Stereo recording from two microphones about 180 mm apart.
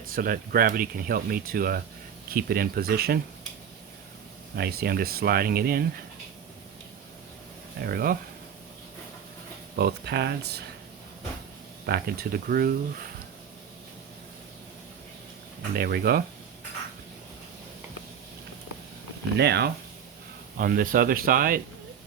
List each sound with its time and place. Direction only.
0.1 s speech: 50° right (ahead or behind)
4.5 s speech: 60° right (ahead or behind)
7.8 s speech: 55° right (ahead or behind)
9.7 s speech: 65° right (ahead or behind)
11.9 s speech: 55° right (ahead or behind)
15.7 s speech: 60° right (ahead or behind)
19.4 s speech: 65° right (ahead or behind)
20.6 s speech: 50° right (ahead or behind)